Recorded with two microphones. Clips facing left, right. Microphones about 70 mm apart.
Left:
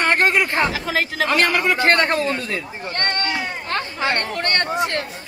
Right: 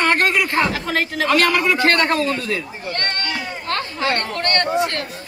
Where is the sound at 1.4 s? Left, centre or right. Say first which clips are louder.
Right 1 dB; left.